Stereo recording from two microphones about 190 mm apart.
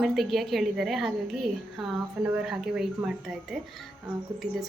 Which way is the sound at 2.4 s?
Centre (ahead or behind).